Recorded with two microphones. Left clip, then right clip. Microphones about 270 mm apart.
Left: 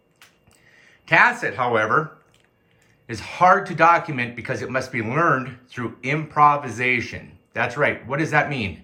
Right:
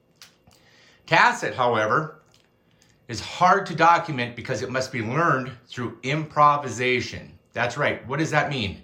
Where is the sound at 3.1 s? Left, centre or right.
Centre.